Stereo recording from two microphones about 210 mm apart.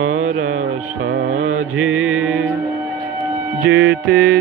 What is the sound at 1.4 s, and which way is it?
Mantra, 70° right (ahead or behind).